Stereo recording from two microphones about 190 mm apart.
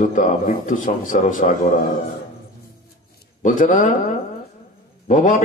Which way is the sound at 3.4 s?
45° left (ahead or behind).